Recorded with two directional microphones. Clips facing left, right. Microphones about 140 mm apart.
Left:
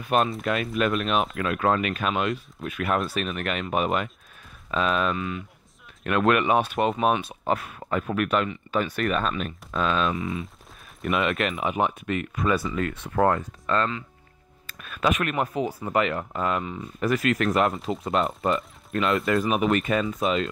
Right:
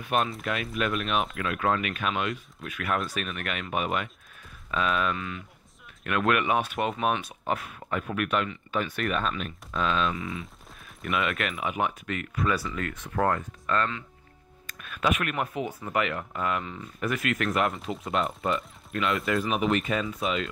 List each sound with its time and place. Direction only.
0.1 s speech: 35° left (ahead or behind)
2.2 s speech: 25° left (ahead or behind); by 10.1 s 45° left (ahead or behind)
10.1 s speech: 25° left (ahead or behind); by 20.4 s 45° left (ahead or behind)